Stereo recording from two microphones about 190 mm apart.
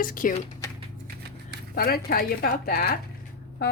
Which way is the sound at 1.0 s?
55° right (ahead or behind).